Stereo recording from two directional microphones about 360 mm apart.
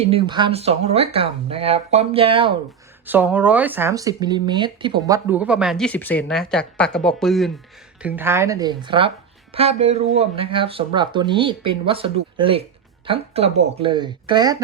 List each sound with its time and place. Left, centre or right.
0.0 s speech: centre